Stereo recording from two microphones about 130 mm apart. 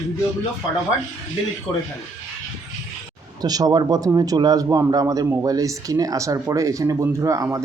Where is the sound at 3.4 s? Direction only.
30° right (ahead or behind).